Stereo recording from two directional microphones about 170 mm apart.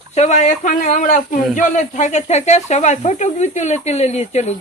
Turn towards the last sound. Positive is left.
turn(degrees=40)  # may be behind; listen again after turning